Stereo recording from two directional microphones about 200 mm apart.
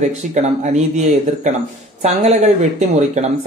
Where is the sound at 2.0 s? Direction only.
35° right (ahead or behind).